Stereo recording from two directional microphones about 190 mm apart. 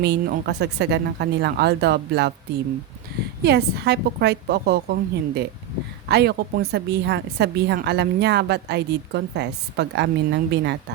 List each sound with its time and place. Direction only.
0.0 s a woman's voice: 60° right (ahead or behind)
3.4 s a woman's voice: 60° right (ahead or behind)